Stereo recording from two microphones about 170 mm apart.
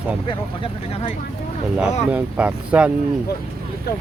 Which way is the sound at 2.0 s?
5° right (ahead or behind).